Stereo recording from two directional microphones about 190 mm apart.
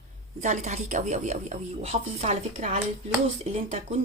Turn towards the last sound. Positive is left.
turn(degrees=-35)  # may be behind; listen again after turning